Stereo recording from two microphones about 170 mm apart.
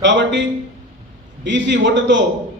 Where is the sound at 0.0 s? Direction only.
90° right.